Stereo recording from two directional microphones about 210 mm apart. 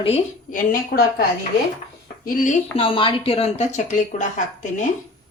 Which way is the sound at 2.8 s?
25° left (ahead or behind).